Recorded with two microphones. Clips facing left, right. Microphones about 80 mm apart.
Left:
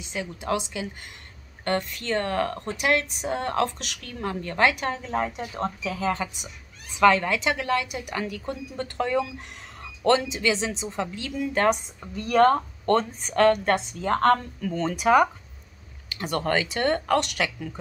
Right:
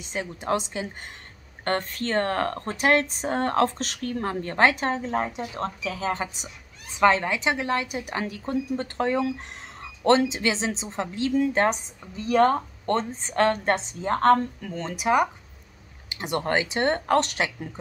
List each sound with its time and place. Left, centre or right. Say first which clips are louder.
0.0 s speech: right 1 dB; right
5.6 s speech: left 2 dB; left
5.9 s a woman's voice: left 1 dB; right
12.2 s speech: left 1 dB; left
12.5 s a woman's voice: left 3 dB; right
14.7 s speech: left 5 dB; centre
15.0 s speech: left 3 dB; centre
16.1 s a woman's voice: even; right